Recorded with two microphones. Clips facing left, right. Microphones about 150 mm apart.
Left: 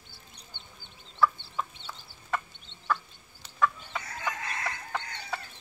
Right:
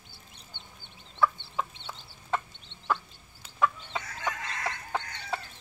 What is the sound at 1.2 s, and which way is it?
Chicken, 20° right (ahead or behind).